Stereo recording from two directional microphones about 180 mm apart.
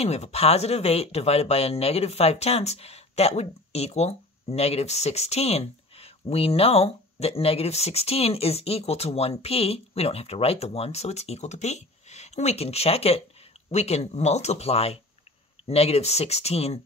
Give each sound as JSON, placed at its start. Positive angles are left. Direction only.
{"t": 0.0, "sound": "speech", "side_deg": 35}